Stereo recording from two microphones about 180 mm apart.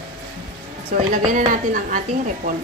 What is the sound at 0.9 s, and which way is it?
A woman's voice, 45° right (ahead or behind).